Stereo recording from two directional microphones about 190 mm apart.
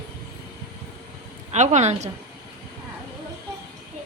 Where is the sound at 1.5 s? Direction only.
40° right (ahead or behind).